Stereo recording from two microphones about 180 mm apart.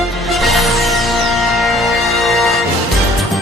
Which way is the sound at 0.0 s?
Centre (ahead or behind).